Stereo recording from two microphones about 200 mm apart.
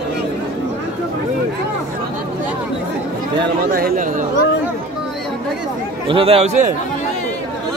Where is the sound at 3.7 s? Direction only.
45° right (ahead or behind).